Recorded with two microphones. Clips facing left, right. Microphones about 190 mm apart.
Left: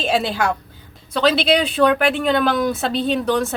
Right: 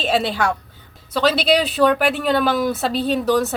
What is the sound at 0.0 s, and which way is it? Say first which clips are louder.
Speech: even; centre (ahead or behind).